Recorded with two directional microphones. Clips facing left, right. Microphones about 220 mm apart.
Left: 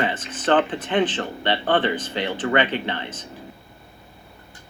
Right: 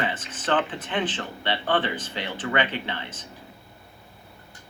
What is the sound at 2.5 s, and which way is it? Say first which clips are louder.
Speech: left 4 dB; 60° left (ahead or behind).